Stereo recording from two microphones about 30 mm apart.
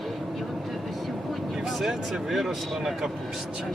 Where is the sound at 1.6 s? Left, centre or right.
Centre.